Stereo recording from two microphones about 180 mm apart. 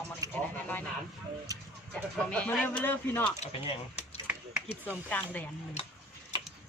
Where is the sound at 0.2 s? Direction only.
20° right (ahead or behind).